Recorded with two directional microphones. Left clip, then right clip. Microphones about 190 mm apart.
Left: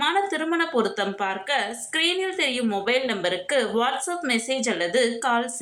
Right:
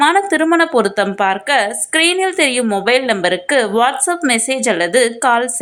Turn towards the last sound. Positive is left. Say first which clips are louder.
# right 9 dB
turn(degrees=-45)  # may be behind; listen again after turning